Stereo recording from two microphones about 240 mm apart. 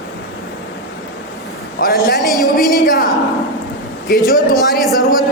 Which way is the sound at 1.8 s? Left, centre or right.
Left.